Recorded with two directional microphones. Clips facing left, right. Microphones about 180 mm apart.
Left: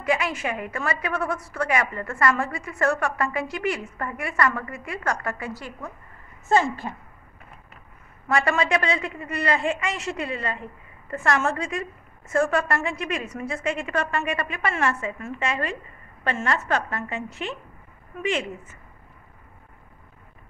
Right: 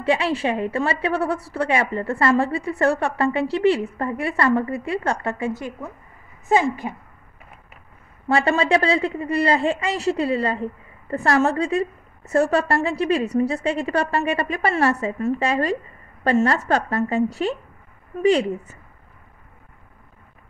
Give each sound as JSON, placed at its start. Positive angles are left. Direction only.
{"t": 0.0, "sound": "a woman's voice", "side_deg": -30}
{"t": 8.3, "sound": "a woman's voice", "side_deg": -30}